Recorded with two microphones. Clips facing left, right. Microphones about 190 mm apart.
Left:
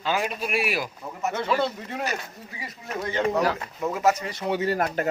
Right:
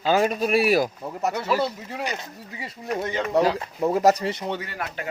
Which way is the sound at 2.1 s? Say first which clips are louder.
Even; 25° right (ahead or behind).